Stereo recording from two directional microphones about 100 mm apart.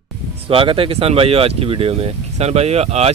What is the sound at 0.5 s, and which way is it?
Speech, 65° right (ahead or behind).